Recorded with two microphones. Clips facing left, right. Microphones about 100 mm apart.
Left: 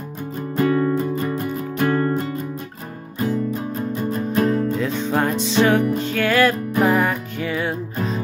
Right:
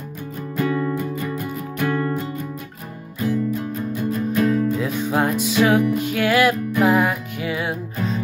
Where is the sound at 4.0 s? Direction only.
35° left (ahead or behind).